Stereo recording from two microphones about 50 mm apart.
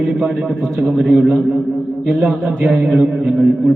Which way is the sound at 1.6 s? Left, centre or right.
Centre.